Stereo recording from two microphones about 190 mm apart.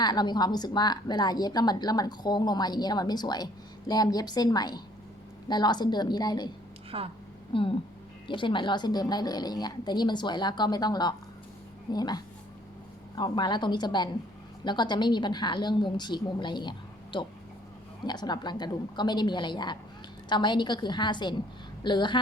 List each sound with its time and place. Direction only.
0.0 s a woman's voice: 20° left (ahead or behind)
6.9 s a woman's voice: 30° right (ahead or behind)
7.5 s a woman's voice: 25° left (ahead or behind)